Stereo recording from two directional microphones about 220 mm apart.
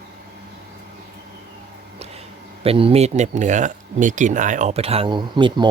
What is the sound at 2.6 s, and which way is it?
Speech, 25° right (ahead or behind).